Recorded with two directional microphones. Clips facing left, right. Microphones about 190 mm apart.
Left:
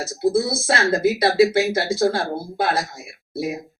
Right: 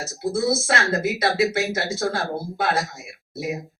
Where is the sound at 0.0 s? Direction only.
30° left (ahead or behind).